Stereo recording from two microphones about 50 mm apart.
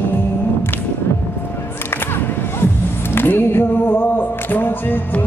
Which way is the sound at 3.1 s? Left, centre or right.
Left.